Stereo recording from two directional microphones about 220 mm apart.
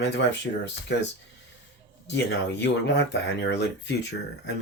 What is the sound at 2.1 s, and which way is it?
Speech, 50° left (ahead or behind).